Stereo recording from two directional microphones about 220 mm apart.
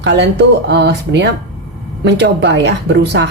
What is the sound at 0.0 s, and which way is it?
Speech, 50° right (ahead or behind).